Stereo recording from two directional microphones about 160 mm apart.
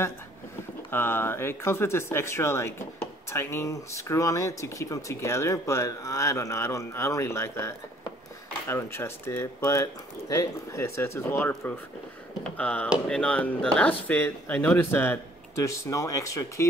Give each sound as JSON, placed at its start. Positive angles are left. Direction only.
{"t": 0.8, "sound": "speech", "side_deg": 15}